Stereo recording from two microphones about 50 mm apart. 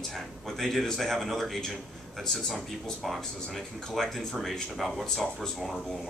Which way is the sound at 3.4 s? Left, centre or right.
Centre.